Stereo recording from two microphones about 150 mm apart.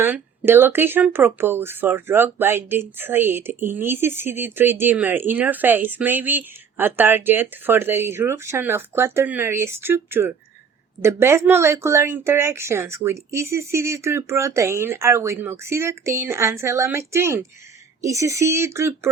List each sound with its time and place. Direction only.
0.0 s speech: 15° right (ahead or behind)